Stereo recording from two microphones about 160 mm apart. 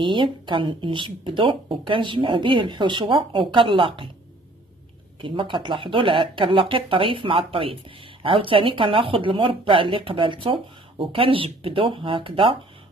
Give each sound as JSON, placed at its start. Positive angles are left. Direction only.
{"t": 0.0, "sound": "speech", "side_deg": -30}
{"t": 5.2, "sound": "speech", "side_deg": -30}